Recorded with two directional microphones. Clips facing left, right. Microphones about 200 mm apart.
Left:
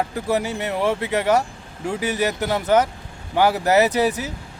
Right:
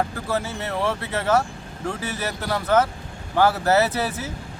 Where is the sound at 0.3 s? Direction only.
15° left (ahead or behind).